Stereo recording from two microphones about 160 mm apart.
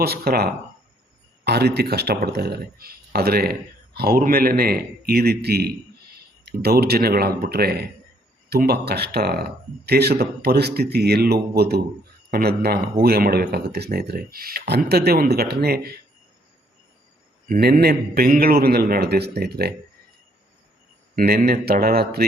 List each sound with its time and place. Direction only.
0.0 s speech: 75° right (ahead or behind)
1.5 s speech: 90° right
12.3 s speech: 75° right (ahead or behind)
17.5 s speech: 75° right (ahead or behind)
21.2 s speech: 75° right (ahead or behind)